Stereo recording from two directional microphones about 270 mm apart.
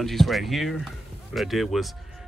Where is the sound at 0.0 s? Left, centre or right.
Centre.